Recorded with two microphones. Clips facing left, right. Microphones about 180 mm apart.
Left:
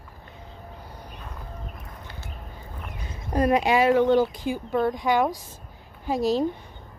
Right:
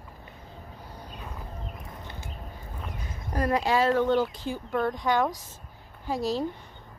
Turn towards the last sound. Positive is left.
turn(degrees=15)  # may be behind; listen again after turning